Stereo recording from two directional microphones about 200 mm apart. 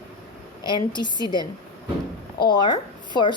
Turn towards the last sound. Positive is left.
turn(degrees=20)  # may be behind; listen again after turning